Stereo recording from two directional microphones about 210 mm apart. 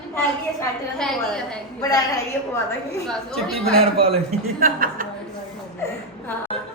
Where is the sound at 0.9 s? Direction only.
5° left (ahead or behind).